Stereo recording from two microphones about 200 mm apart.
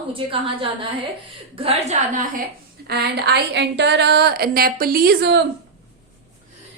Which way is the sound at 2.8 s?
55° right (ahead or behind).